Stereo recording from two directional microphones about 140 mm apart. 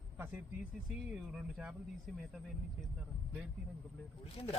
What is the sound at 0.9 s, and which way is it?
Speech, 5° right (ahead or behind).